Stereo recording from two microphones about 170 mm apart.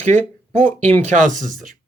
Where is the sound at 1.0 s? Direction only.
45° right (ahead or behind).